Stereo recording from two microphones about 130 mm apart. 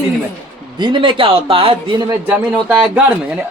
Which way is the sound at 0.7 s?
40° right (ahead or behind).